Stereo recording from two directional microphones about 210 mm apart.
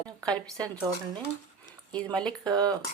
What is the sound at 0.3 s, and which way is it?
Speech, 5° left (ahead or behind).